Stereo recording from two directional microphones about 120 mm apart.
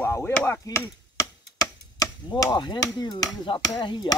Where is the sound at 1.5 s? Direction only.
30° left (ahead or behind).